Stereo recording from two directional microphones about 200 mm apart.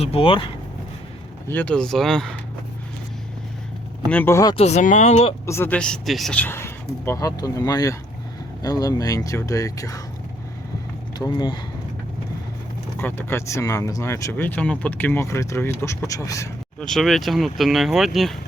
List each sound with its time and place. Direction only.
0.0 s speech: 30° left (ahead or behind)
1.5 s speech: 10° left (ahead or behind)
4.1 s speech: 10° left (ahead or behind)
4.5 s speech: 35° left (ahead or behind)
5.5 s speech: 10° left (ahead or behind)
11.2 s speech: 20° left (ahead or behind)
13.0 s speech: 10° left (ahead or behind)
16.8 s speech: centre (ahead or behind)